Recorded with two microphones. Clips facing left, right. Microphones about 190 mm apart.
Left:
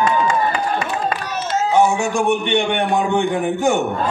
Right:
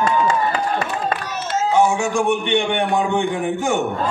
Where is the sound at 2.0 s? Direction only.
65° left (ahead or behind).